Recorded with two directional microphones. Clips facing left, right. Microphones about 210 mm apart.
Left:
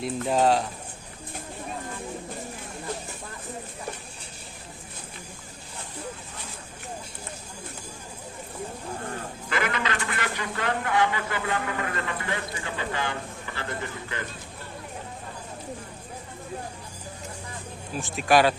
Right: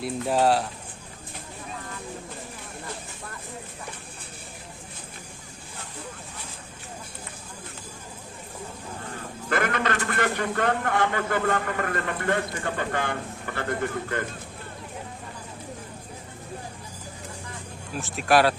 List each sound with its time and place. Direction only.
0.0 s speech: 5° right (ahead or behind)
9.5 s speech: 50° right (ahead or behind)
17.9 s speech: centre (ahead or behind)